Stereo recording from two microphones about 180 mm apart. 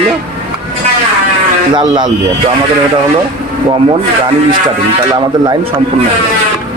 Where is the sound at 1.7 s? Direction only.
25° right (ahead or behind).